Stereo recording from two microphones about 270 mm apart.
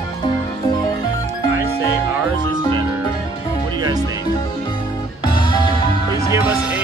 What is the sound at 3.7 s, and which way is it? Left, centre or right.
Music, centre.